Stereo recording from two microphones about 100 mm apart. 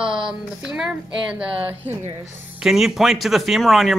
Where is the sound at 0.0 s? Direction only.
5° right (ahead or behind).